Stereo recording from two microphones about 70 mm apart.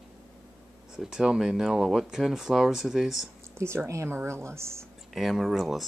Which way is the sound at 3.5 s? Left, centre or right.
Right.